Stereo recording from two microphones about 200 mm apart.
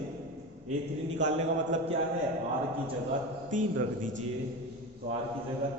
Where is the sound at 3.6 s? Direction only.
40° right (ahead or behind).